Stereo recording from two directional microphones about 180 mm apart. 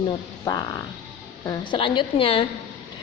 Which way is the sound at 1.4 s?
20° left (ahead or behind).